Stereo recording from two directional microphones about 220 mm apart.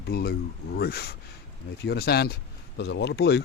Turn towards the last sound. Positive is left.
turn(degrees=50)  # may be behind; listen again after turning